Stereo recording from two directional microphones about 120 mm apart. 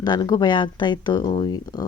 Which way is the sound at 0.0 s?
35° left (ahead or behind).